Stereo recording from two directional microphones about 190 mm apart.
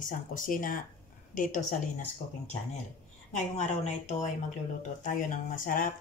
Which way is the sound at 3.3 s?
35° left (ahead or behind).